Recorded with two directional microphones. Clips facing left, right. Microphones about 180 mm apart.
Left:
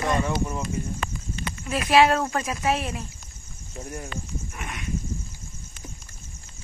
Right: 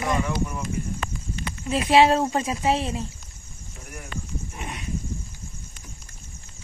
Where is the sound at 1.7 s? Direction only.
25° right (ahead or behind).